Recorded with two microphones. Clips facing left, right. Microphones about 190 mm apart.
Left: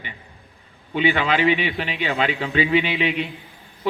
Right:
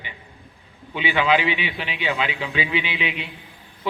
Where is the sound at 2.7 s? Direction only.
55° left (ahead or behind).